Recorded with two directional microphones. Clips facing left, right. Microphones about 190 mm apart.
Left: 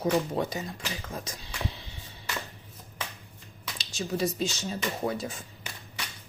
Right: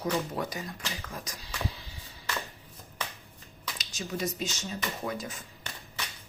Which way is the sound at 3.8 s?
30° left (ahead or behind).